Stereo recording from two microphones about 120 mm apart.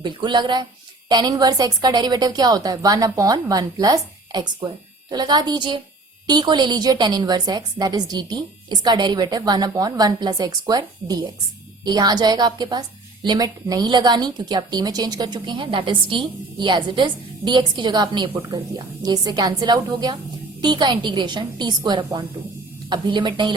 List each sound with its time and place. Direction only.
0.0 s a woman's voice: 40° right (ahead or behind)